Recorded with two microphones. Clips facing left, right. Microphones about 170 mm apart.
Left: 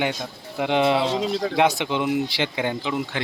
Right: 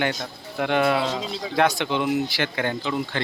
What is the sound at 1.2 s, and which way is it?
Speech, 65° left (ahead or behind).